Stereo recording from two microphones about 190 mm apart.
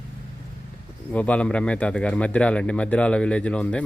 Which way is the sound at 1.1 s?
5° left (ahead or behind).